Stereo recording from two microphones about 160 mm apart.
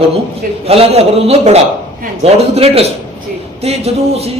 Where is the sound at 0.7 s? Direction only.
40° right (ahead or behind).